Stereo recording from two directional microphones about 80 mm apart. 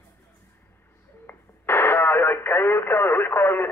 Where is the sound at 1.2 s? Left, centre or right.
Left.